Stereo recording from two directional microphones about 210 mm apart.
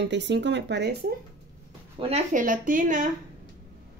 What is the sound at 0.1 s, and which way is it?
Speech, 55° right (ahead or behind).